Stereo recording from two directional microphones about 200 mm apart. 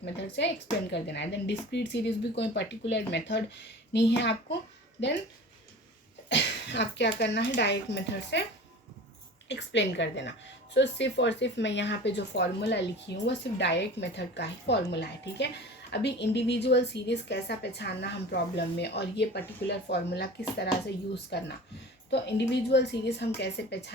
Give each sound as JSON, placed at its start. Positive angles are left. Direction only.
{"t": 0.0, "sound": "speech", "side_deg": 60}
{"t": 6.2, "sound": "speech", "side_deg": 60}
{"t": 9.5, "sound": "speech", "side_deg": 60}
{"t": 15.9, "sound": "speech", "side_deg": 60}